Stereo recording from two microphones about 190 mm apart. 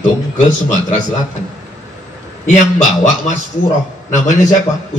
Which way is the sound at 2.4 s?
40° left (ahead or behind).